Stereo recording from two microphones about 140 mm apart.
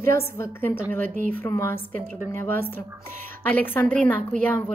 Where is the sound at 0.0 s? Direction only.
20° left (ahead or behind).